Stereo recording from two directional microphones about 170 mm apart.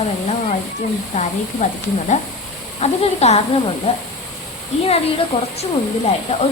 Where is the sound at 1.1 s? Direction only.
45° left (ahead or behind).